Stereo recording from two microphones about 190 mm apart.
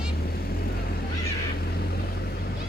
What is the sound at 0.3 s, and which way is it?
Vehicle, 55° left (ahead or behind).